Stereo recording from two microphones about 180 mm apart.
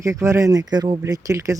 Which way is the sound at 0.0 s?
15° right (ahead or behind).